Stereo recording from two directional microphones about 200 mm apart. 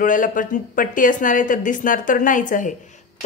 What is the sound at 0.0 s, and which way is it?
Speech, 40° left (ahead or behind).